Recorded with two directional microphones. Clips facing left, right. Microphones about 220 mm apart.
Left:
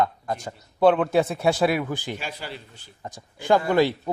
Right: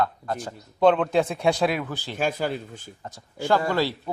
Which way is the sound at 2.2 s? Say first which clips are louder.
Right 10 dB; 50° right (ahead or behind).